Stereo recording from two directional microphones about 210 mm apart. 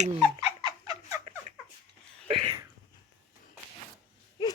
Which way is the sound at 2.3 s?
25° right (ahead or behind).